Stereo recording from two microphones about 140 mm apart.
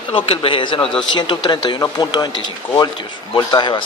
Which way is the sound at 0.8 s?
5° left (ahead or behind).